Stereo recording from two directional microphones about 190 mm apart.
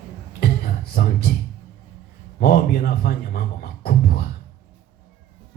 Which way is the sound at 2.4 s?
50° left (ahead or behind).